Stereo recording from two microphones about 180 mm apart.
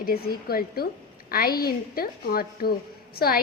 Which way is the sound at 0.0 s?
55° left (ahead or behind).